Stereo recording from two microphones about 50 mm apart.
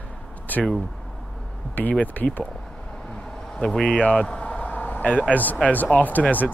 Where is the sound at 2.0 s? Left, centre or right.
Left.